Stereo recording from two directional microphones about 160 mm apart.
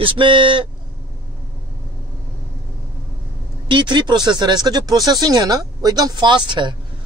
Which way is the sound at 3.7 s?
30° right (ahead or behind).